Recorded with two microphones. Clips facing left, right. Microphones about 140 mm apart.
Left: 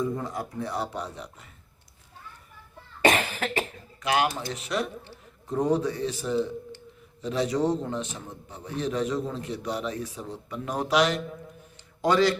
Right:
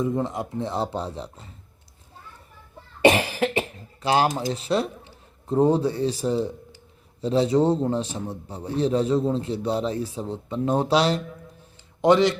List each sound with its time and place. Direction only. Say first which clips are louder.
0.0 s a man's voice: right 4 dB; 20° right (ahead or behind)
3.0 s cough: right 5 dB; 30° right (ahead or behind)
4.0 s a man's voice: right 4 dB; 30° right (ahead or behind)